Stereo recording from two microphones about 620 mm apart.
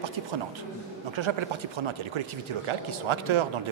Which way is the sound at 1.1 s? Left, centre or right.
Right.